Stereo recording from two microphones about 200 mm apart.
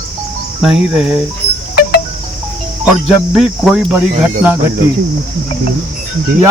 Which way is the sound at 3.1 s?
Centre (ahead or behind).